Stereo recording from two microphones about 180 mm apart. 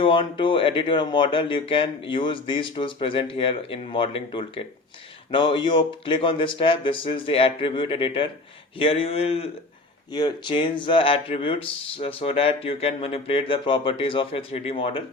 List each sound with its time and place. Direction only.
0.0 s speech: 30° left (ahead or behind)